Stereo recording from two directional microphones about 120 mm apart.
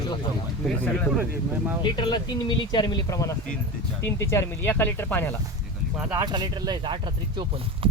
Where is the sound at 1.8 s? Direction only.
40° left (ahead or behind); by 5.3 s 15° left (ahead or behind).